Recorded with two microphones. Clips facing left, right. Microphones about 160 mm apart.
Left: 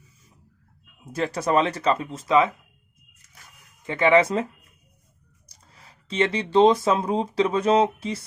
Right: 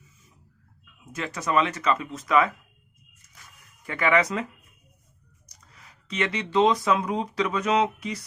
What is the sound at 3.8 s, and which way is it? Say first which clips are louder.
Speech: left 5 dB; 25° left (ahead or behind).